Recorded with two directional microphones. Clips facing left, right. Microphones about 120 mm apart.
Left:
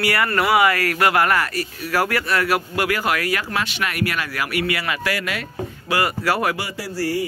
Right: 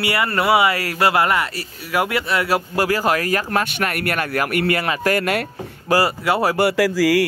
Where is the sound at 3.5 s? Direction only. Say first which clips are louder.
Right 4 dB; 50° right (ahead or behind).